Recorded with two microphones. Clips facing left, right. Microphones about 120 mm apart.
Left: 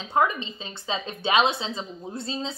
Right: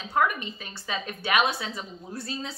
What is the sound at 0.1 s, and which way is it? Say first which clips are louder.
A woman's voice: left 2 dB; 25° left (ahead or behind).